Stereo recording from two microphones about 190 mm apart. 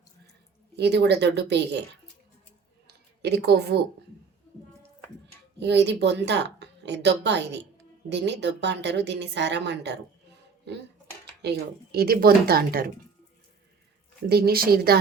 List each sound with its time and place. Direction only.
0.8 s speech: 60° right (ahead or behind)
2.8 s a sound: 60° right (ahead or behind)
5.5 s speech: 65° right (ahead or behind)
14.3 s speech: 55° right (ahead or behind)